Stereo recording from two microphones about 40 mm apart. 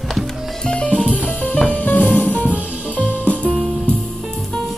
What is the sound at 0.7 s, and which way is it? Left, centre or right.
Drum kit, left.